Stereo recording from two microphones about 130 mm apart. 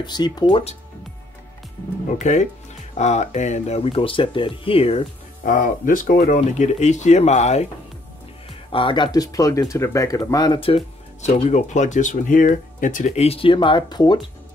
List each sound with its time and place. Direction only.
0.0 s speech: 35° left (ahead or behind)
2.0 s speech: 65° left (ahead or behind); by 5.0 s 50° left (ahead or behind)
5.4 s speech: 90° left; by 7.6 s 60° left (ahead or behind)
8.5 s speech: 40° left (ahead or behind)
11.1 s speech: 60° left (ahead or behind); by 14.2 s 35° left (ahead or behind)